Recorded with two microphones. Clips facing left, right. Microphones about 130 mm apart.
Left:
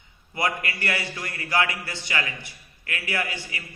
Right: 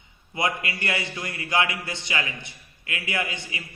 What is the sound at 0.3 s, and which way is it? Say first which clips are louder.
A man's voice: even; 20° right (ahead or behind).